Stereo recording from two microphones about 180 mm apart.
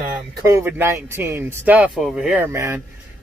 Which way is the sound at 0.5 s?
15° right (ahead or behind).